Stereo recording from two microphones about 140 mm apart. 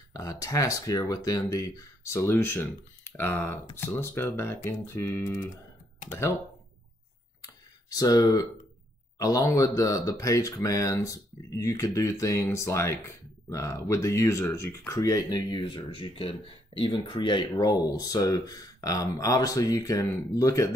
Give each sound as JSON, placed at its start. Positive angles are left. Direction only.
{"t": 0.1, "sound": "speech", "side_deg": 25}
{"t": 7.4, "sound": "a sound", "side_deg": 25}
{"t": 9.2, "sound": "speech", "side_deg": 25}